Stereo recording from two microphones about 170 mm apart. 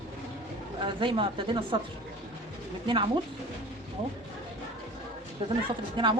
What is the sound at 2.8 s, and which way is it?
Speech, 30° right (ahead or behind).